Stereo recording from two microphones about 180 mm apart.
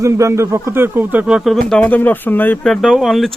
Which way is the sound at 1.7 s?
10° left (ahead or behind).